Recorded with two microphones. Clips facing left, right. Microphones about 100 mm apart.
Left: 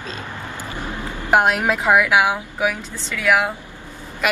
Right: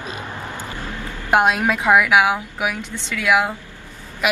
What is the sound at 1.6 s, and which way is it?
Speech, 15° left (ahead or behind).